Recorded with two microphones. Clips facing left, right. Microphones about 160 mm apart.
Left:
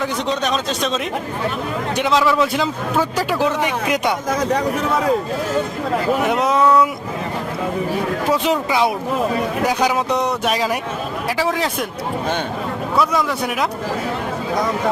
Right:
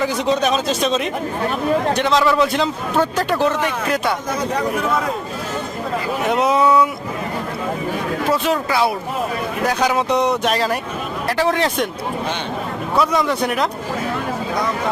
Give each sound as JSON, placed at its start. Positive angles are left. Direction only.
{"t": 0.0, "sound": "speech", "side_deg": -5}
{"t": 2.0, "sound": "a man's voice", "side_deg": 10}
{"t": 3.8, "sound": "speech", "side_deg": 20}
{"t": 6.3, "sound": "speech", "side_deg": -5}
{"t": 8.3, "sound": "a man's voice", "side_deg": 15}
{"t": 13.0, "sound": "speech", "side_deg": 0}